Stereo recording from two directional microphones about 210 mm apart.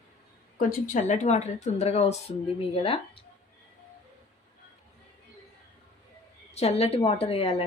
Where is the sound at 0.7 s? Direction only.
35° left (ahead or behind).